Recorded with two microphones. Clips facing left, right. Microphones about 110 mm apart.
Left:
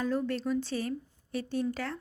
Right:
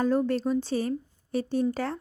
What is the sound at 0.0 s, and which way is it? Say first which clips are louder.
Speech: right 6 dB; 40° right (ahead or behind).